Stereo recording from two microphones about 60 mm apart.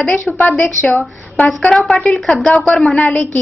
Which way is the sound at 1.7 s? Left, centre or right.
Centre.